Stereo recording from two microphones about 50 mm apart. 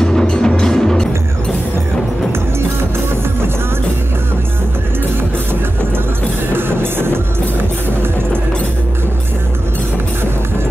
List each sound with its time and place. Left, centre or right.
0.0 s music: centre
6.5 s music: right